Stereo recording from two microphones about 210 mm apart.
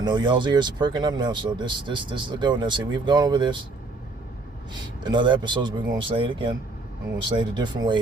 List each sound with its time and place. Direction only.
0.0 s speech: 20° right (ahead or behind)
5.0 s speech: 20° right (ahead or behind)